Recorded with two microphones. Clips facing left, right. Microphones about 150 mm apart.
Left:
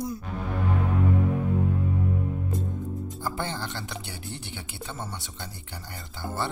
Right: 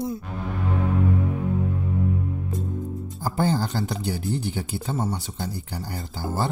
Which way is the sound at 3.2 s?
40° right (ahead or behind).